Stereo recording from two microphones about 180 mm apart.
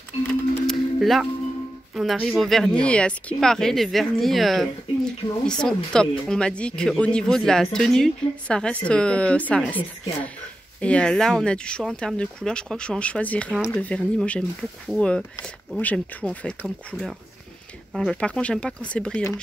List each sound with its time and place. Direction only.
0.3 s music: centre (ahead or behind)
2.0 s speech: centre (ahead or behind)